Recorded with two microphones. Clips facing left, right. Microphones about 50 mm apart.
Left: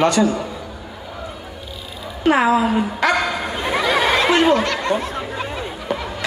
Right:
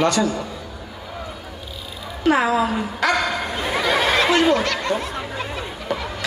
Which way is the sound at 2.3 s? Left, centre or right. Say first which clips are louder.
Left 3 dB; left.